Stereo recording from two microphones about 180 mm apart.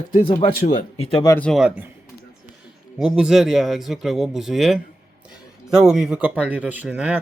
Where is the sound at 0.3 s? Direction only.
25° left (ahead or behind).